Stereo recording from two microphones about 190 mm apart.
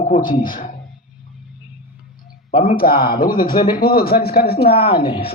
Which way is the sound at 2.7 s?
50° left (ahead or behind).